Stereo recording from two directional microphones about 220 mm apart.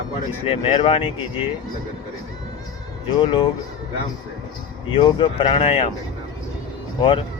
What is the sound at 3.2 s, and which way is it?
Speech, 20° left (ahead or behind).